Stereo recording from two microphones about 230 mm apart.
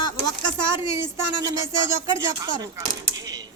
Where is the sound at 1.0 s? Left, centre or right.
Centre.